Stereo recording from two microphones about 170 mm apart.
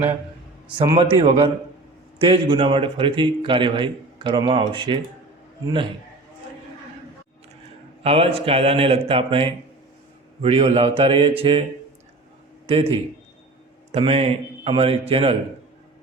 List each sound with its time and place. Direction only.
1.1 s a man's voice: 30° right (ahead or behind)
8.0 s speech: 35° right (ahead or behind)
12.6 s speech: 35° right (ahead or behind)